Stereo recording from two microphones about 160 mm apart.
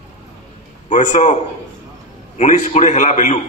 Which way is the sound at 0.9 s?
45° left (ahead or behind).